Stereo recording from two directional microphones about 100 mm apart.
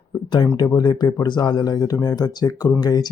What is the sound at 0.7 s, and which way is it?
Speech, 45° left (ahead or behind).